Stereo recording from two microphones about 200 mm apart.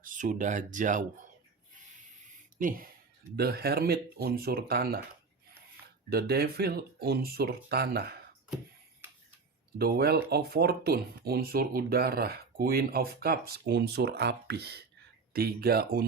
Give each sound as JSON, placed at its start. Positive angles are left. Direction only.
{"t": 0.0, "sound": "speech", "side_deg": -40}
{"t": 2.6, "sound": "speech", "side_deg": -45}
{"t": 6.1, "sound": "speech", "side_deg": -50}
{"t": 9.7, "sound": "speech", "side_deg": -50}